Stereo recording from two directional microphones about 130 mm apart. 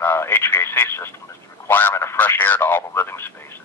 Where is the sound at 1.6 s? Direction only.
20° left (ahead or behind).